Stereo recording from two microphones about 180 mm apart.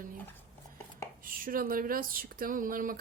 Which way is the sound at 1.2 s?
50° right (ahead or behind).